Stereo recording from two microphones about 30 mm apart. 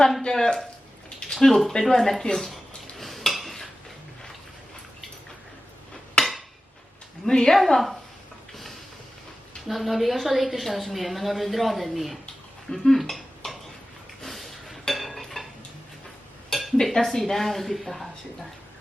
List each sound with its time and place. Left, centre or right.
0.2 s speech: centre
3.0 s dishes: centre
6.2 s a sound: left
7.3 s speech: centre
7.7 s a woman's voice: centre
9.6 s a woman's voice: centre
12.7 s speech: centre
13.0 s dishes: centre
14.3 s a sound: centre
16.9 s speech: centre